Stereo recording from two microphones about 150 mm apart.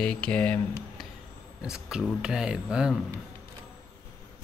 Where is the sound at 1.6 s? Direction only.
5° right (ahead or behind).